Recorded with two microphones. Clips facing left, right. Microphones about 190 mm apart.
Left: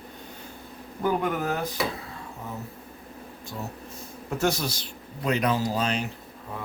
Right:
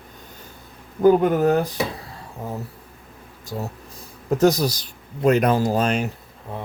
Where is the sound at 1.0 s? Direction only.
40° right (ahead or behind).